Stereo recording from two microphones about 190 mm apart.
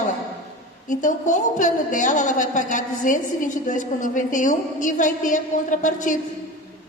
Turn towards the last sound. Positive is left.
turn(degrees=40)  # may be behind; listen again after turning